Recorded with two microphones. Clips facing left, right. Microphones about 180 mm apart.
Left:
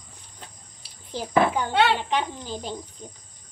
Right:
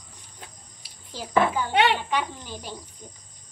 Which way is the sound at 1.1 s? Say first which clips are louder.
Left 1 dB; 20° left (ahead or behind).